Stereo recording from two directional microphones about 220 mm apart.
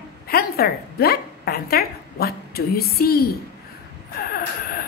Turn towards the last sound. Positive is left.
turn(degrees=45)  # may be behind; listen again after turning